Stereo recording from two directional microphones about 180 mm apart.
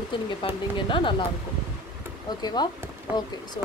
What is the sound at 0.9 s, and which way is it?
Speech, 30° left (ahead or behind).